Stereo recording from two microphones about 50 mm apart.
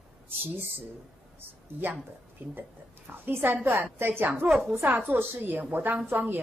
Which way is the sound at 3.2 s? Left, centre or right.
Right.